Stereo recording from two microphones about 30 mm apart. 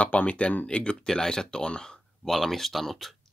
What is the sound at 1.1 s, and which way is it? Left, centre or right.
Speech, left.